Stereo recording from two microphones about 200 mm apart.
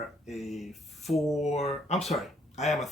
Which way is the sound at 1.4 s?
35° left (ahead or behind).